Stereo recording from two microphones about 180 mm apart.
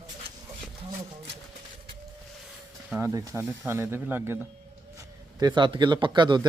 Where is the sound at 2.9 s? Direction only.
15° right (ahead or behind).